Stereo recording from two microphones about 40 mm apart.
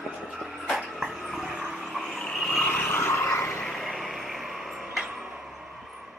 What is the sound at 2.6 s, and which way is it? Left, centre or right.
Vehicle, left.